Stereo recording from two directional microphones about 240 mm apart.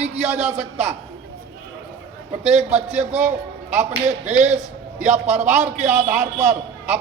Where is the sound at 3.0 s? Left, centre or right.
Right.